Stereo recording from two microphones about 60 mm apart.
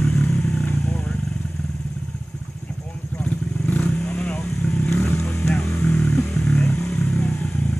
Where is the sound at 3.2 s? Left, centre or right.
Centre.